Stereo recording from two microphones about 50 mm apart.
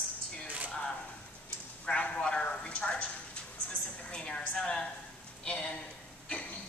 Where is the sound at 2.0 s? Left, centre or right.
Left.